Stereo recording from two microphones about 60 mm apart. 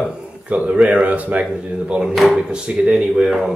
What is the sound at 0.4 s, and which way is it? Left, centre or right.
Speech, centre.